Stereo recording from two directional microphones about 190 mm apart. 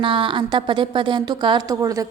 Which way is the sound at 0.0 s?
25° right (ahead or behind).